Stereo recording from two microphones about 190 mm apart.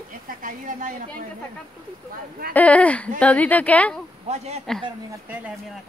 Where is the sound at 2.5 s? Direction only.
5° left (ahead or behind).